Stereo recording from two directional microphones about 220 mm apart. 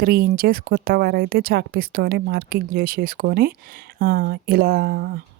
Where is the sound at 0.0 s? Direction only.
40° right (ahead or behind).